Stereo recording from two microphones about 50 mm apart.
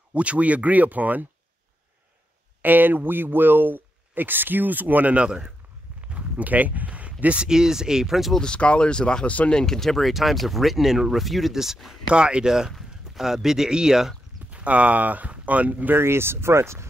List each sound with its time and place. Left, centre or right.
0.1 s speech: right
2.6 s speech: right
5.9 s a sound: right
7.4 s speech: centre
8.4 s speech: left
9.5 s speech: centre
12.1 s speech: centre
14.5 s speech: right
15.9 s speech: right